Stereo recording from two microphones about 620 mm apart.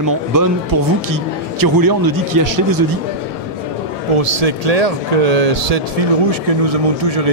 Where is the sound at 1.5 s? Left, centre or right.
Right.